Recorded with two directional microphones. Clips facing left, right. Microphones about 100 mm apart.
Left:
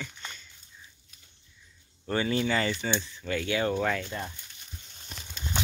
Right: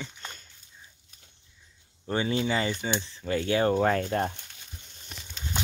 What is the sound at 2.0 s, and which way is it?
Speech, 20° right (ahead or behind).